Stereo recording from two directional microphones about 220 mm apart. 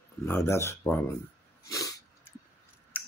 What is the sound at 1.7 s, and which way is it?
Dog, 15° left (ahead or behind).